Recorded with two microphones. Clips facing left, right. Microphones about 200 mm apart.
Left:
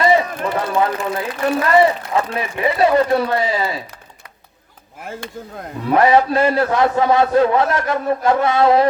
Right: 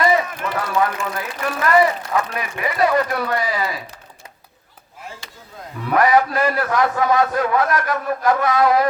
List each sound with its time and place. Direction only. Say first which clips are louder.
0.3 s speech: left 4 dB; 30° left (ahead or behind)
5.9 s speech: left 3 dB; 25° left (ahead or behind)